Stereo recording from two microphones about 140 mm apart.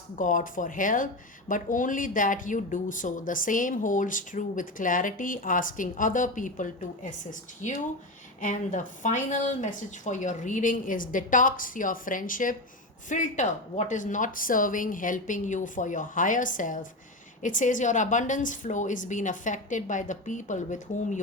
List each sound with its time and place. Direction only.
0.2 s speech: 70° left (ahead or behind)
13.1 s a woman's voice: 60° left (ahead or behind)